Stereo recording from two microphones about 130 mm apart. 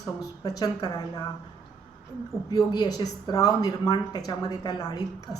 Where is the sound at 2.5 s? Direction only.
30° left (ahead or behind).